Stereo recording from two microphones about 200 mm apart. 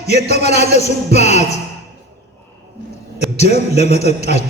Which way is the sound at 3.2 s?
35° left (ahead or behind).